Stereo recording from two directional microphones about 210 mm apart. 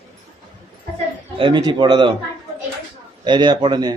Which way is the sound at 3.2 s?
20° right (ahead or behind).